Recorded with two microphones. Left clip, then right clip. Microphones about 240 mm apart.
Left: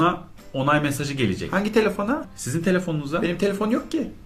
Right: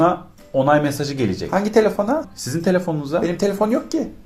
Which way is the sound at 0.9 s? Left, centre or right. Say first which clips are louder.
Right 3 dB; centre.